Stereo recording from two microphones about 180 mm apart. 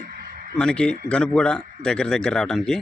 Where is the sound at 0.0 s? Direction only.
50° right (ahead or behind).